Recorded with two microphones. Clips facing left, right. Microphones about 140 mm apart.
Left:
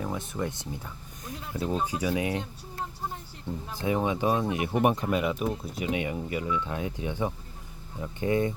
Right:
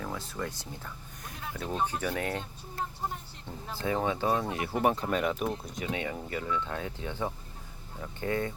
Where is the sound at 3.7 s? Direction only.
15° left (ahead or behind).